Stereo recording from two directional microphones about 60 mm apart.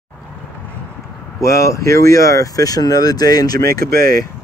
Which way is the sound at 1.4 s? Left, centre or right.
Left.